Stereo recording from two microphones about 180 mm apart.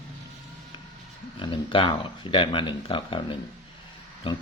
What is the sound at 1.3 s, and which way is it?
Speech, 30° left (ahead or behind).